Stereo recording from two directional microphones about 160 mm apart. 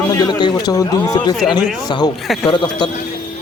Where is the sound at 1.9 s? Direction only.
25° left (ahead or behind).